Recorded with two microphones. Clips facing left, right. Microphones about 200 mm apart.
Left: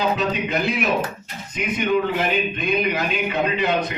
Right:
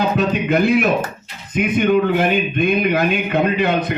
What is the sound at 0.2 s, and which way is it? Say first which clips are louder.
Speech: right 6 dB; 55° right (ahead or behind).